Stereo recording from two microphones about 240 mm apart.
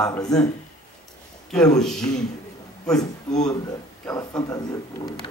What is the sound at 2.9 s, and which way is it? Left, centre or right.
Speech, centre.